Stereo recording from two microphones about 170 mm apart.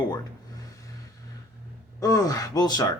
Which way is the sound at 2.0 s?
20° left (ahead or behind).